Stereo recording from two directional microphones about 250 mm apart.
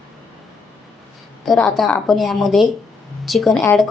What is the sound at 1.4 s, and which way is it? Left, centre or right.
Speech, centre.